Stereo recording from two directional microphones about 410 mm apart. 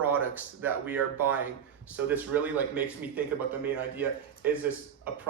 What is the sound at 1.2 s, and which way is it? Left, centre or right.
A man's voice, centre.